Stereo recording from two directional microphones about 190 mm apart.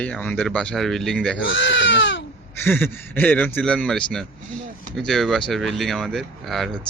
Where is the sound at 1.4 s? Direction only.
75° left (ahead or behind).